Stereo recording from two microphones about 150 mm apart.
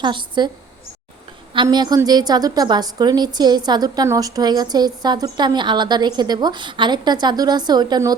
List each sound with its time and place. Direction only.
0.0 s a woman's voice: 30° right (ahead or behind)
1.6 s a woman's voice: 25° right (ahead or behind)